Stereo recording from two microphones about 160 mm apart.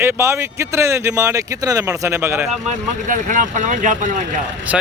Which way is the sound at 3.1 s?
55° right (ahead or behind).